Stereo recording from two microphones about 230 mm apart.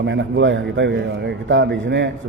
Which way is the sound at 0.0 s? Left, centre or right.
Right.